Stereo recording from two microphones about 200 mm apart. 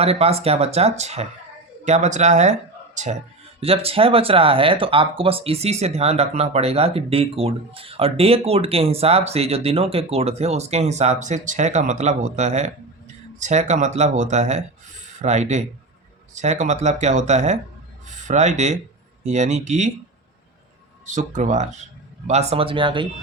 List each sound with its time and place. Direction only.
0.0 s speech: 30° right (ahead or behind)
21.1 s speech: 40° right (ahead or behind)